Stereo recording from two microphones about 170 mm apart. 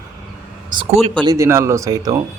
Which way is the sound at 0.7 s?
35° right (ahead or behind).